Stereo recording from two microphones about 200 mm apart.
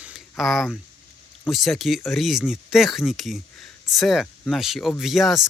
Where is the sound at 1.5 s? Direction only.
Centre (ahead or behind).